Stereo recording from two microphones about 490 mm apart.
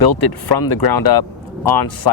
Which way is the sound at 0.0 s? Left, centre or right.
Left.